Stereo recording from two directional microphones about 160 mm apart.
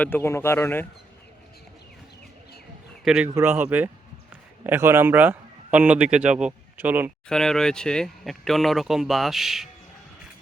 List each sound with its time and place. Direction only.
0.0 s speech: 15° left (ahead or behind)
3.0 s a man's voice: 5° right (ahead or behind)
3.2 s a man's voice: 15° right (ahead or behind)
7.3 s speech: 5° left (ahead or behind)